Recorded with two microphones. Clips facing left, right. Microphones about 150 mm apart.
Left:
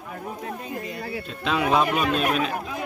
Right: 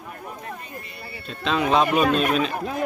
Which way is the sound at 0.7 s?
90° left.